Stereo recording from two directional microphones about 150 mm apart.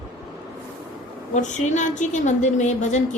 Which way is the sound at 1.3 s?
55° left (ahead or behind).